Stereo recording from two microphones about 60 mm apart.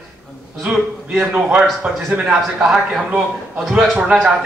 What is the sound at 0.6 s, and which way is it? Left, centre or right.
Speech, centre.